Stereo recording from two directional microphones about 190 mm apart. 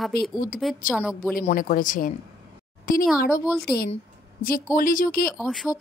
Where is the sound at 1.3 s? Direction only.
45° left (ahead or behind).